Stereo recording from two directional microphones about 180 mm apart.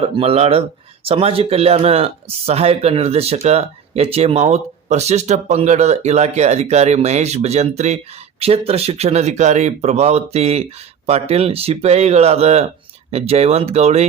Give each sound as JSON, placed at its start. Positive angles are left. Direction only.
{"t": 0.0, "sound": "speech", "side_deg": -35}